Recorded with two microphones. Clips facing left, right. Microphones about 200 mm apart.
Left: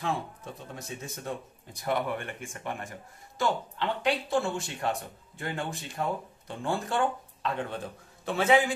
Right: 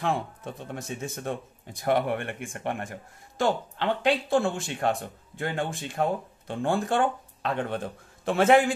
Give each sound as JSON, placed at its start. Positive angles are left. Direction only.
{"t": 0.7, "sound": "speech", "side_deg": -50}